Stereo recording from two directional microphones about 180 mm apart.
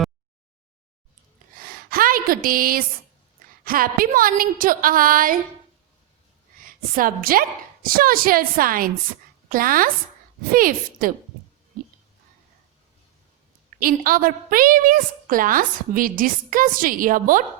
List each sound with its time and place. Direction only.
1.6 s a sound: 55° right (ahead or behind)
3.6 s a woman's voice: 55° right (ahead or behind)
6.7 s a woman's voice: 50° right (ahead or behind)
13.7 s a woman's voice: 50° right (ahead or behind)